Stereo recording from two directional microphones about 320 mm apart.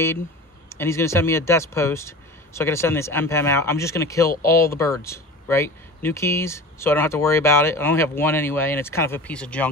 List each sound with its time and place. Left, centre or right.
0.7 s speech: centre